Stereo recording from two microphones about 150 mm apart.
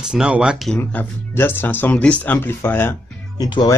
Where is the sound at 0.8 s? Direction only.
15° left (ahead or behind).